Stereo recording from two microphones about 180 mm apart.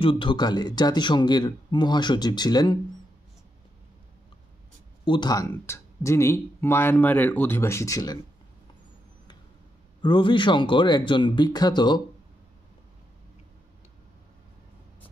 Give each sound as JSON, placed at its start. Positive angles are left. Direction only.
{"t": 0.0, "sound": "speech", "side_deg": 25}
{"t": 5.0, "sound": "speech", "side_deg": 25}
{"t": 10.0, "sound": "speech", "side_deg": 25}